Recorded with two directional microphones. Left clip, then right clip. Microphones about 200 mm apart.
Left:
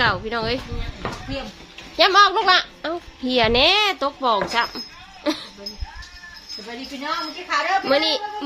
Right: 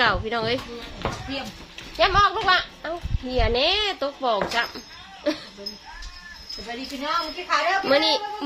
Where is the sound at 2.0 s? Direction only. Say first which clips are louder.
Left 4 dB; 60° left (ahead or behind); by 5.7 s 20° left (ahead or behind).